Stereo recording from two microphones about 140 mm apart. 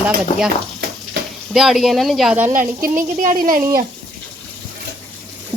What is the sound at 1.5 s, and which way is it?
Speech, 5° right (ahead or behind).